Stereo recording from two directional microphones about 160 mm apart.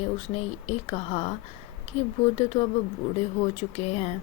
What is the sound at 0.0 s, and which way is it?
A woman's voice, 40° left (ahead or behind).